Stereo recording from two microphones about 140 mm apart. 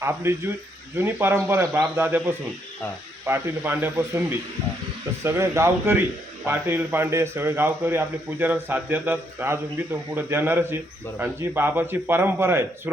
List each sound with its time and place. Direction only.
0.0 s a man's voice: 20° right (ahead or behind)